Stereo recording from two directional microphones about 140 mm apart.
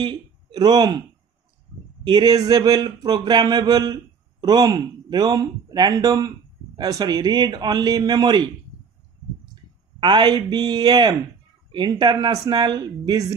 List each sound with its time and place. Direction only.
0.0 s speech: 30° right (ahead or behind)
2.0 s a man's voice: 30° right (ahead or behind)
9.9 s a man's voice: 30° right (ahead or behind)